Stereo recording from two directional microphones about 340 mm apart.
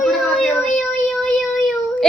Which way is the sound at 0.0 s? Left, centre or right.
Centre.